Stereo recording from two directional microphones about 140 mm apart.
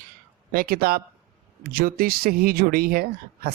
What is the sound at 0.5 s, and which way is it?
Speech, 90° right.